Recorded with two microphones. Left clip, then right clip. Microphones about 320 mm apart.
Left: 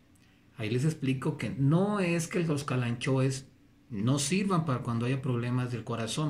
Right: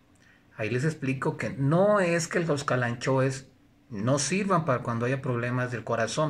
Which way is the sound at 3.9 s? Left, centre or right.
Centre.